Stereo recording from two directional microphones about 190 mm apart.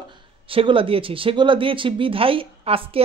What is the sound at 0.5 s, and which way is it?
Speech, 30° right (ahead or behind).